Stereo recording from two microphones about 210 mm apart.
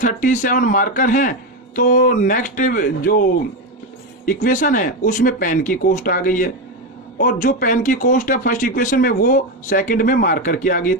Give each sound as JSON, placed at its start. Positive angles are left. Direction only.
{"t": 0.0, "sound": "speech", "side_deg": 40}
{"t": 4.4, "sound": "speech", "side_deg": 40}